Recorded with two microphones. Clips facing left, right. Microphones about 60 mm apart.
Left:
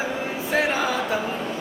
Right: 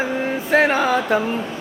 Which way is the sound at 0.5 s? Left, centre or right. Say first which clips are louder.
Right 6 dB; right.